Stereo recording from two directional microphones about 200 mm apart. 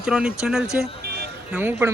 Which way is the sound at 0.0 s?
5° right (ahead or behind).